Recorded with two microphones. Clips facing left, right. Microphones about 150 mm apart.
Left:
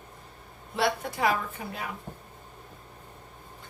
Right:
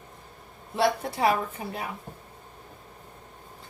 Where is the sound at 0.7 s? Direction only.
30° right (ahead or behind).